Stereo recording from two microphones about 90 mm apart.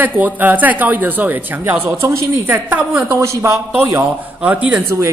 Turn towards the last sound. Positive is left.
turn(degrees=-15)  # may be behind; listen again after turning